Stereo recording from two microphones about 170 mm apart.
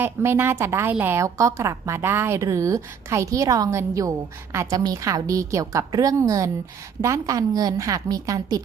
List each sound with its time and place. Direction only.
0.0 s a woman's voice: 15° right (ahead or behind)